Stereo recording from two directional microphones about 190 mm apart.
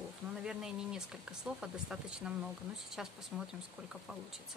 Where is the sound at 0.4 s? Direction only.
5° right (ahead or behind).